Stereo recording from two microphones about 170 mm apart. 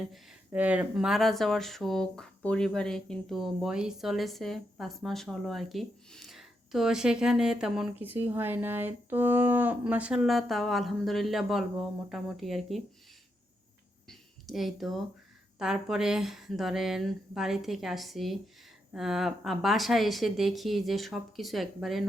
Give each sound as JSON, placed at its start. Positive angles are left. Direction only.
{"t": 0.0, "sound": "speech", "side_deg": -5}
{"t": 14.1, "sound": "speech", "side_deg": 0}